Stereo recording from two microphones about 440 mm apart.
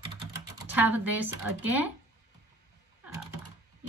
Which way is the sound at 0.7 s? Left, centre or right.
Centre.